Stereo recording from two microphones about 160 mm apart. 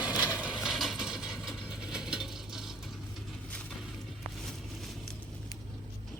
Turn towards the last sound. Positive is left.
turn(degrees=0)  # may be behind; listen again after turning